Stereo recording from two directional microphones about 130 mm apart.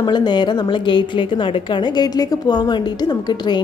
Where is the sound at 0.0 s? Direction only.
35° left (ahead or behind).